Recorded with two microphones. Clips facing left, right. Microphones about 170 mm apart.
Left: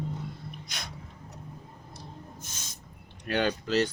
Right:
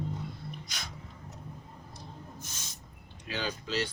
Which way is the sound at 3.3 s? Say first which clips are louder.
Left 8 dB; 60° left (ahead or behind).